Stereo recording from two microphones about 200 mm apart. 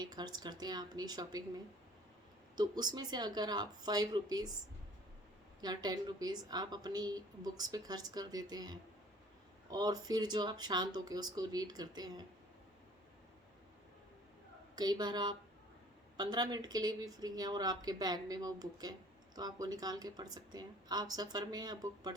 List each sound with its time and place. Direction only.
0.0 s a woman's voice: 20° right (ahead or behind)
2.6 s a woman's voice: 20° right (ahead or behind)
5.5 s a woman's voice: 20° right (ahead or behind)
14.8 s a woman's voice: 20° right (ahead or behind)